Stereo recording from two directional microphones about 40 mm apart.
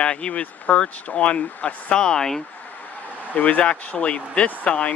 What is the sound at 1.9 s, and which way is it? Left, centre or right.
Speech, centre.